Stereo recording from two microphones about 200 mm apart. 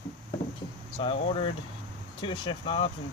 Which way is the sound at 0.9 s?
30° left (ahead or behind).